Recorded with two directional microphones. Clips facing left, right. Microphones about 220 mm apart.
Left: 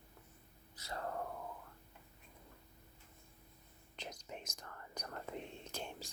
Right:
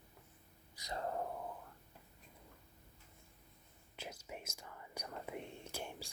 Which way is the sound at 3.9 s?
5° right (ahead or behind).